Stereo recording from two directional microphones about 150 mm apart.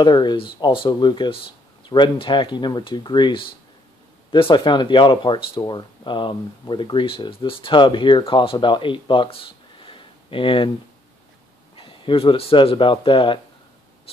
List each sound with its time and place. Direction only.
0.0 s speech: 30° left (ahead or behind)
11.7 s speech: 35° left (ahead or behind)
14.1 s a sound: 40° left (ahead or behind)